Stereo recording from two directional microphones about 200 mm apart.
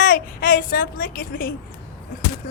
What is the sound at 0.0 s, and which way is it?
A child's voice, 45° left (ahead or behind).